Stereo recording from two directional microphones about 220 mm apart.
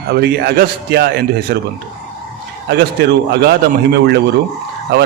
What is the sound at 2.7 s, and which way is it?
Speech, 50° right (ahead or behind).